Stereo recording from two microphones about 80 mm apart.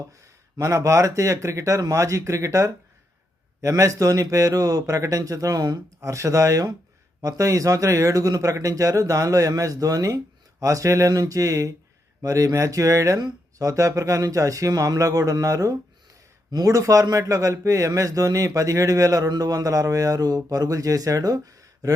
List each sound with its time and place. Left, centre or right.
0.6 s a man's voice: right
6.0 s a man's voice: right
13.1 s speech: right
13.7 s a man's voice: right